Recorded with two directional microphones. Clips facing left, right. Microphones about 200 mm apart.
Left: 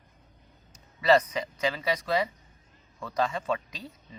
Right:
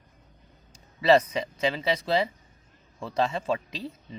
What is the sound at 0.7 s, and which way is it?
Speech, 25° right (ahead or behind).